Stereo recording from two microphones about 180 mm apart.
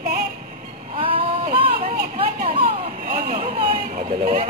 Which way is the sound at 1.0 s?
30° right (ahead or behind).